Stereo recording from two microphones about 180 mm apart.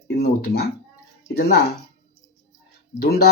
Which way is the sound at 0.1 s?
65° left (ahead or behind).